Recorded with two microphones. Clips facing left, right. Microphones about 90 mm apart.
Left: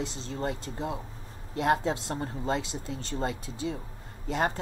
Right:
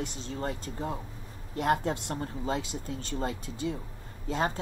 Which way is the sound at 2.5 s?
90° left.